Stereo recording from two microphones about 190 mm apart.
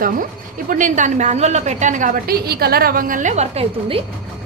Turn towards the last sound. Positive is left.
turn(degrees=-35)  # may be behind; listen again after turning